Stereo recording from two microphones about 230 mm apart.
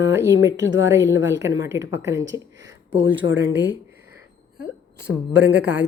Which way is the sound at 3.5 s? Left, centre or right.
Right.